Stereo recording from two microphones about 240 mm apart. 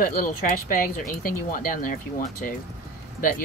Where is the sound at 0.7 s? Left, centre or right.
Left.